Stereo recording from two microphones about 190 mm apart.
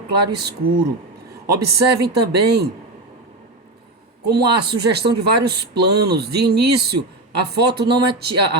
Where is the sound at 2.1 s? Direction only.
60° right (ahead or behind).